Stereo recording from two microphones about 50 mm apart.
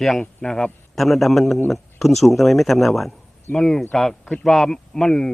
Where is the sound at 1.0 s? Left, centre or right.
Centre.